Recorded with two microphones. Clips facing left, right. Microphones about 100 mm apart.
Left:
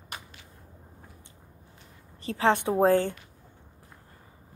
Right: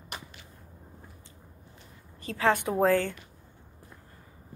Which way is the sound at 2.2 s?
20° left (ahead or behind).